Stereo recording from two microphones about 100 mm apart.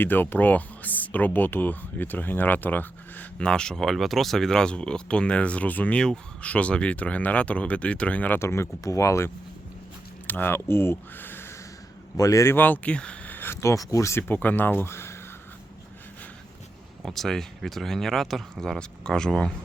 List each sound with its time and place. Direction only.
0.0 s speech: 20° left (ahead or behind)
8.4 s speech: 25° left (ahead or behind)
12.1 s a man's voice: 35° left (ahead or behind)
12.5 s speech: 20° left (ahead or behind)
17.0 s speech: 5° left (ahead or behind)